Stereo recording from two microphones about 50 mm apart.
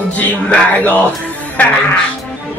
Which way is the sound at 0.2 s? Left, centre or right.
Left.